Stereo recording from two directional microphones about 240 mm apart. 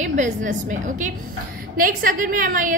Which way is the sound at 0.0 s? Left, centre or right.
Right.